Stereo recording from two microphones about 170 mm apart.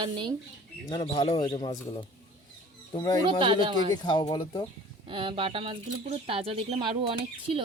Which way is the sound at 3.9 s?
30° left (ahead or behind).